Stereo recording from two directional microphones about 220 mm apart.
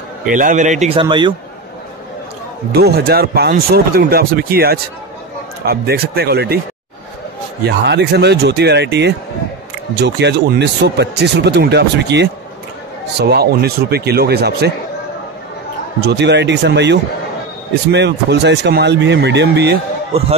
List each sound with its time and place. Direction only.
0.3 s speech: 35° right (ahead or behind)
2.7 s speech: 45° right (ahead or behind)
7.6 s speech: 50° right (ahead or behind)
16.0 s speech: 50° right (ahead or behind)